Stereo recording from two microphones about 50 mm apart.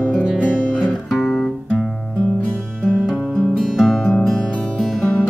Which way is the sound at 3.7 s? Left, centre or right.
Centre.